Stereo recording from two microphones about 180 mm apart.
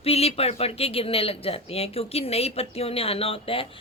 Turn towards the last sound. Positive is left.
turn(degrees=30)  # may be behind; listen again after turning